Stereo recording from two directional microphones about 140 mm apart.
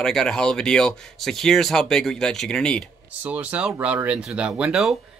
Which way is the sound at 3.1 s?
10° right (ahead or behind).